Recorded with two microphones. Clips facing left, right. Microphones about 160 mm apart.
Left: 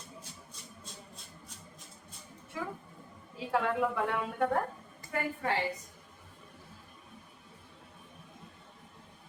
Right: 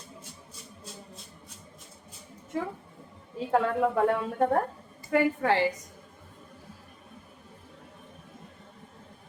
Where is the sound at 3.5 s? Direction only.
40° right (ahead or behind).